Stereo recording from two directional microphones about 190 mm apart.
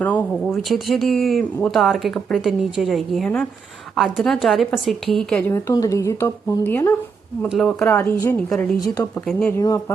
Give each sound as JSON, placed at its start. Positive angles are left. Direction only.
{"t": 0.0, "sound": "speech", "side_deg": 10}
{"t": 5.4, "sound": "a woman's voice", "side_deg": 15}
{"t": 7.4, "sound": "speech", "side_deg": 0}
{"t": 8.8, "sound": "a woman's voice", "side_deg": 15}
{"t": 9.6, "sound": "a woman's voice", "side_deg": 15}